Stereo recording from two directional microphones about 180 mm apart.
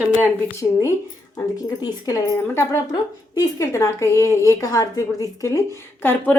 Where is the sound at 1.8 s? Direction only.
20° left (ahead or behind).